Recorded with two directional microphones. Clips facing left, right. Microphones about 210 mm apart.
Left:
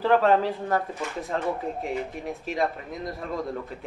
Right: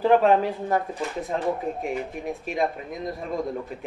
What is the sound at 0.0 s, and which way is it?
Speech, 15° right (ahead or behind).